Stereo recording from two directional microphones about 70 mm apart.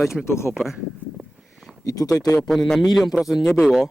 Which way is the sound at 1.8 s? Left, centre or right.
Left.